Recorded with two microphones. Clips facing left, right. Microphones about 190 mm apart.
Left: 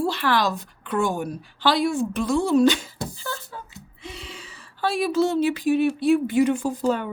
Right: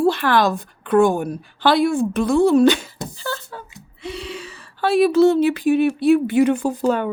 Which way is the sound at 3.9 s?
75° right (ahead or behind).